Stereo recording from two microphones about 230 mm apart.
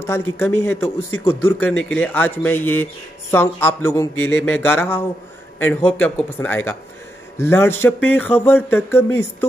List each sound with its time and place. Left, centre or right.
0.0 s speech: centre
4.1 s speech: left
4.6 s speech: centre